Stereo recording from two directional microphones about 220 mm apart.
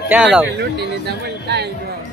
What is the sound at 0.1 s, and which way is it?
Speech, 5° right (ahead or behind).